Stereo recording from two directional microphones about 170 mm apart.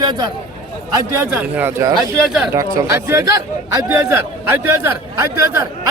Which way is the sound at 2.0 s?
Centre (ahead or behind).